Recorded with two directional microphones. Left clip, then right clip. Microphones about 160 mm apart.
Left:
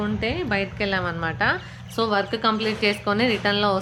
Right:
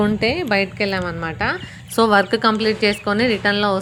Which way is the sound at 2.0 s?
55° right (ahead or behind).